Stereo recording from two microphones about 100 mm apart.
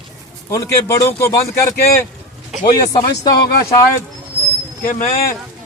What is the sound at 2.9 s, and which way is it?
Speech, 40° left (ahead or behind).